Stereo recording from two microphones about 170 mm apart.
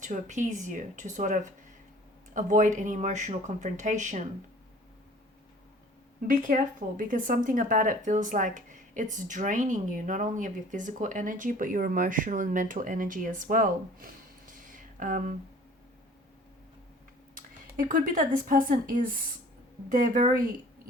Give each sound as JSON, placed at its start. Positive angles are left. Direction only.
{"t": 0.0, "sound": "speech", "side_deg": -45}
{"t": 6.2, "sound": "speech", "side_deg": -50}
{"t": 17.3, "sound": "speech", "side_deg": -55}